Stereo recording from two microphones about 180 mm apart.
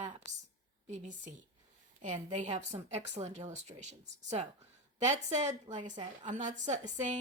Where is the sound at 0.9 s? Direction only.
40° right (ahead or behind).